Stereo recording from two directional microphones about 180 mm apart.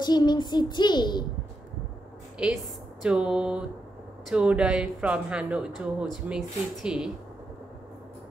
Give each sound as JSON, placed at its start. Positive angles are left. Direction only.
{"t": 0.0, "sound": "child singing", "side_deg": 25}
{"t": 2.3, "sound": "speech", "side_deg": 0}